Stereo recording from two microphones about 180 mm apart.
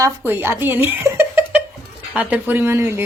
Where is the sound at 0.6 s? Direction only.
10° right (ahead or behind).